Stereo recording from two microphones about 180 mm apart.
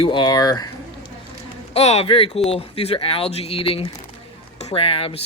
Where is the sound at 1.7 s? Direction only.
35° left (ahead or behind).